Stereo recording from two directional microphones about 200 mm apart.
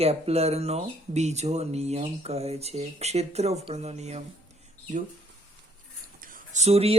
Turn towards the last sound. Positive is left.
turn(degrees=-30)  # may be behind; listen again after turning